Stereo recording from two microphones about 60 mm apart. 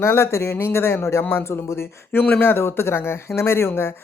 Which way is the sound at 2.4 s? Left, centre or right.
Left.